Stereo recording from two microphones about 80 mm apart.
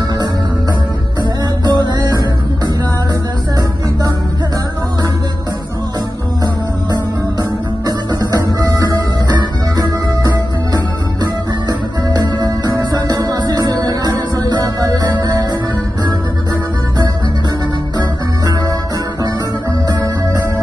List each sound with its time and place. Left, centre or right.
1.6 s music: right
6.4 s music: right
17.9 s music: right